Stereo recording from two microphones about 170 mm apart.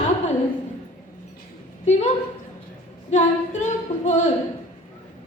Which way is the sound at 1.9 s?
40° left (ahead or behind).